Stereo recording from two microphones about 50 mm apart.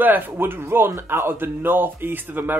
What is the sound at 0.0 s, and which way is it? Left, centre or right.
Speech, right.